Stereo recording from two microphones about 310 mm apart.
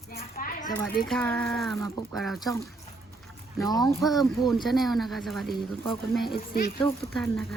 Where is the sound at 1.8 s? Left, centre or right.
Centre.